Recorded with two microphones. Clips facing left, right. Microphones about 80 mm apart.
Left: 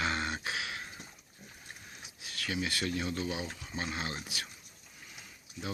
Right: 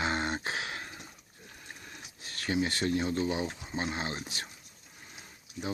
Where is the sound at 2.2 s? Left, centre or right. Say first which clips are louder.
Right 5 dB; right.